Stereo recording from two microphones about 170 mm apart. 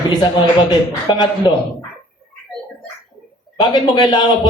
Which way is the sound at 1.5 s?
25° left (ahead or behind).